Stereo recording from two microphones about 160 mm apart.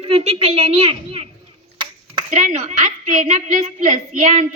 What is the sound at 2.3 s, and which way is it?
A woman's voice, 50° right (ahead or behind).